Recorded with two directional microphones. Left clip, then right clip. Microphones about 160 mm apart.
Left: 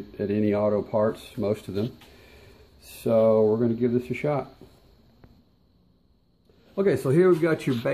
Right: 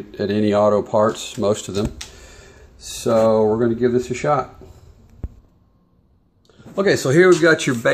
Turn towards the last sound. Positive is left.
turn(degrees=0)  # may be behind; listen again after turning